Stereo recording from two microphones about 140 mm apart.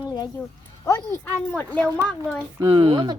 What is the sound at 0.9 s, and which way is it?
Speech, 20° left (ahead or behind).